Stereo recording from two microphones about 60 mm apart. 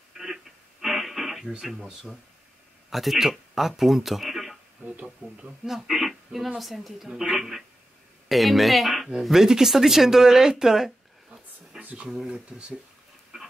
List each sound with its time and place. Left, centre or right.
0.2 s radio: centre
1.7 s speech: centre
4.8 s speech: right
5.2 s speech: centre
7.1 s speech: centre
12.0 s speech: centre